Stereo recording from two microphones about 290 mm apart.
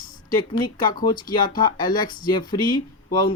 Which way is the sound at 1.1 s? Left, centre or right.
Centre.